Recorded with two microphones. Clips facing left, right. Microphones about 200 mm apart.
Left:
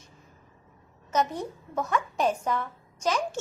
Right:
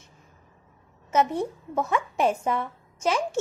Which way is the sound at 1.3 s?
25° right (ahead or behind).